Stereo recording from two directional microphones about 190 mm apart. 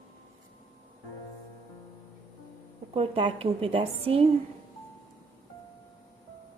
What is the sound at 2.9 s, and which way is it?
Speech, 30° right (ahead or behind).